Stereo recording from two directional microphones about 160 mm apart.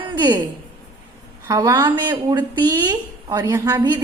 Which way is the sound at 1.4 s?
20° right (ahead or behind).